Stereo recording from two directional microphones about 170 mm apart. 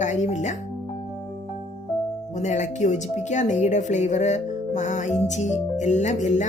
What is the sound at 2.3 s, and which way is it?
Speech, 45° left (ahead or behind).